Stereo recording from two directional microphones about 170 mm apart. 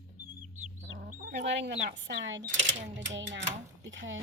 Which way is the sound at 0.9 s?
65° right (ahead or behind).